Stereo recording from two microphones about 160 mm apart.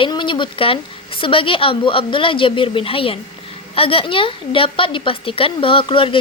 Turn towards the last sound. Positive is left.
turn(degrees=35)  # may be behind; listen again after turning